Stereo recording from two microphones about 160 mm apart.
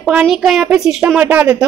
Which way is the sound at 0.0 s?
5° right (ahead or behind).